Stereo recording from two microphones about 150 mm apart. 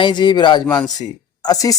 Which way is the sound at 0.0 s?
30° left (ahead or behind).